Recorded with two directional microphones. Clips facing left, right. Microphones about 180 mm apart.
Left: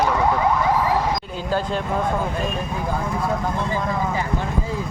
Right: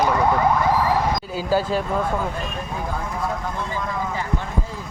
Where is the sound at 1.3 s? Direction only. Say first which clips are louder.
Right 2 dB; 5° right (ahead or behind).